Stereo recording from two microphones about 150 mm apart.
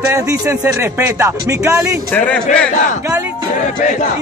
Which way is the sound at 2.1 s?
10° left (ahead or behind).